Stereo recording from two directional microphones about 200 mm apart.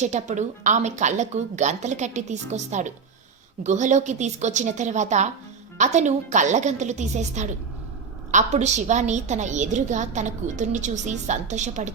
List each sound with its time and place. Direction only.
0.0 s a woman's voice: 35° right (ahead or behind)